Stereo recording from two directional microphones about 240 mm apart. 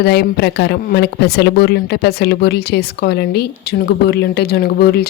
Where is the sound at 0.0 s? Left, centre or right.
Left.